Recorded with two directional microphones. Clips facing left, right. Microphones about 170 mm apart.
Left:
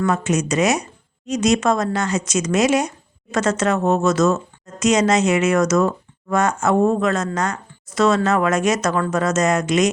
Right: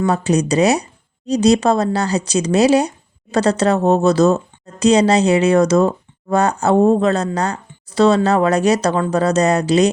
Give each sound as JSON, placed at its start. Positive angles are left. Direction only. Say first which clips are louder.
{"t": 0.0, "sound": "speech", "louder": "right 3 dB", "side_deg": -35}